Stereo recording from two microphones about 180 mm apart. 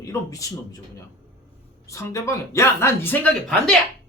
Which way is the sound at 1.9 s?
15° left (ahead or behind).